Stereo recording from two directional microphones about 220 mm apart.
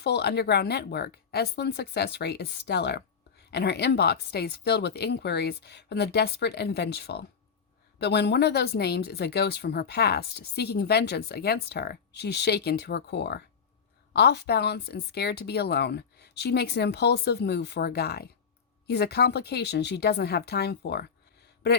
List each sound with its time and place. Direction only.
0.0 s speech: 50° left (ahead or behind)